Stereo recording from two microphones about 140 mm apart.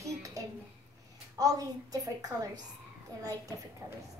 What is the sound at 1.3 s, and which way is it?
A woman's voice, 25° right (ahead or behind).